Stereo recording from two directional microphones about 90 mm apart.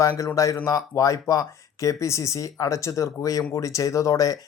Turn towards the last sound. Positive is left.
turn(degrees=40)  # may be behind; listen again after turning